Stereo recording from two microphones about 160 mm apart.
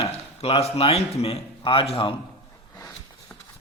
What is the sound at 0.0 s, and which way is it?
A man's voice, 40° left (ahead or behind).